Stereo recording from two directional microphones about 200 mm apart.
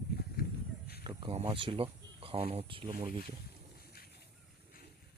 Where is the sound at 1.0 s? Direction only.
20° right (ahead or behind).